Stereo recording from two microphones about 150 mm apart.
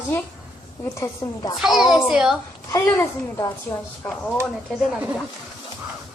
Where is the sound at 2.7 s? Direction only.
20° left (ahead or behind).